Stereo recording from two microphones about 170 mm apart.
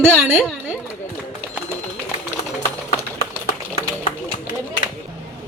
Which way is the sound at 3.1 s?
45° left (ahead or behind).